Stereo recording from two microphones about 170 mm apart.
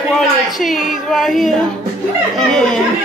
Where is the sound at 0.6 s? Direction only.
Centre (ahead or behind).